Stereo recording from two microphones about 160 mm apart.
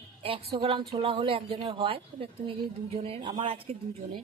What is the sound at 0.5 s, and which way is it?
A woman's voice, 30° right (ahead or behind).